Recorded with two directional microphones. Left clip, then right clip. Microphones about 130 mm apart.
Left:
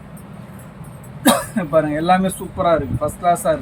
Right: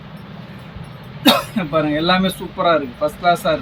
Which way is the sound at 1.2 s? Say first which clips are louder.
Right 2 dB; 10° left (ahead or behind).